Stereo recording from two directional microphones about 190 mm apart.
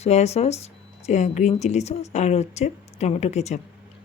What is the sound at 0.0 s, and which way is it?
Speech, 35° left (ahead or behind).